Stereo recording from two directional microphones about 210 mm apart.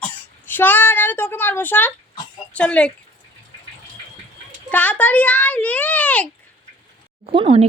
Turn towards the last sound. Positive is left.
turn(degrees=-25)  # may be behind; listen again after turning